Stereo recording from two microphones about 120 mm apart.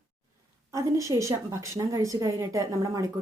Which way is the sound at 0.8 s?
25° right (ahead or behind).